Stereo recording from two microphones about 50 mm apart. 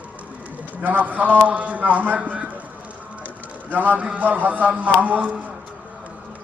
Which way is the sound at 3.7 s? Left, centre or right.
Right.